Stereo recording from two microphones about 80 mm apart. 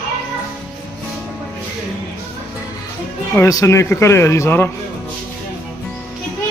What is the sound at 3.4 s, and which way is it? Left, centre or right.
A man's voice, left.